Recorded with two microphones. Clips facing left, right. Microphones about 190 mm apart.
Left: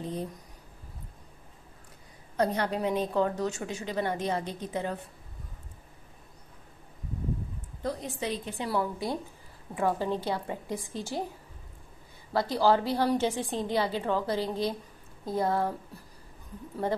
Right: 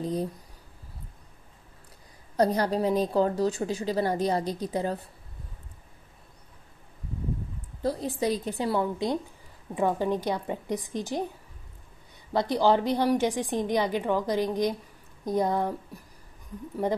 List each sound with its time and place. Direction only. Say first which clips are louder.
0.0 s a woman's voice: right 5 dB; 35° right (ahead or behind)
2.3 s a woman's voice: right 4 dB; 35° right (ahead or behind)
7.8 s a woman's voice: right 5 dB; 30° right (ahead or behind)
8.6 s a woman's voice: right 3 dB; 20° right (ahead or behind)
12.3 s a woman's voice: right 2 dB; 20° right (ahead or behind)